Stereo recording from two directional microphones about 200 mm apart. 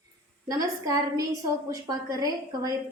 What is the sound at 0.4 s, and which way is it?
A woman's voice, 20° right (ahead or behind).